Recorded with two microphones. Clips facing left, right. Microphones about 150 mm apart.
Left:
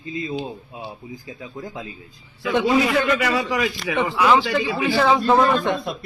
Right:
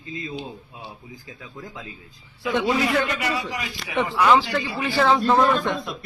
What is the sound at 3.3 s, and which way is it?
Speech, 90° left.